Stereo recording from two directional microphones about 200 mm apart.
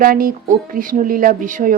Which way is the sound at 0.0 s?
45° right (ahead or behind).